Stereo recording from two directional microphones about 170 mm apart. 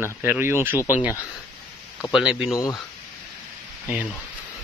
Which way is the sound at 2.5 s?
20° left (ahead or behind).